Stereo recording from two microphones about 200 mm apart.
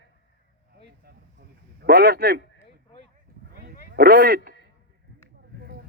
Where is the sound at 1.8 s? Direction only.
55° right (ahead or behind).